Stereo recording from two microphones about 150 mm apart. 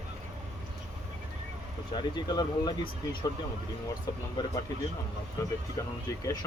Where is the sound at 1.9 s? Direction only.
30° left (ahead or behind).